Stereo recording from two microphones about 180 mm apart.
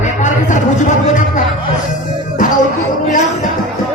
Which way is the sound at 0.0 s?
45° left (ahead or behind).